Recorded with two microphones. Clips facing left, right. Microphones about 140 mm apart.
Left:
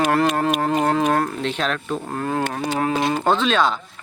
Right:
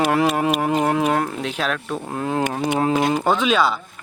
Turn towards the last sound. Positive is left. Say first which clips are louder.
# even
turn(degrees=-5)  # may be behind; listen again after turning